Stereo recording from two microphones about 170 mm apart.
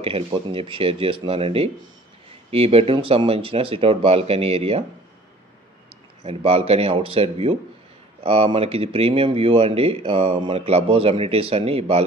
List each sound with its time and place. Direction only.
0.0 s speech: 30° right (ahead or behind)
6.2 s speech: 35° right (ahead or behind)